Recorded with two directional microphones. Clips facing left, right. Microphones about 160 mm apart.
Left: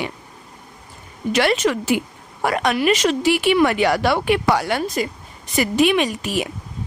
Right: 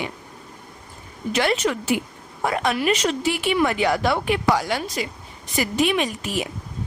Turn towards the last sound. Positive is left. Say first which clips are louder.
# left 3 dB
turn(degrees=75)  # may be behind; listen again after turning